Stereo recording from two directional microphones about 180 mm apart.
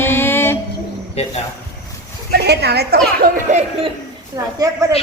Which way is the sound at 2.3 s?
65° right (ahead or behind).